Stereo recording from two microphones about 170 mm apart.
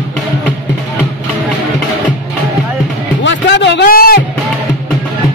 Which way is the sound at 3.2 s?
90° left.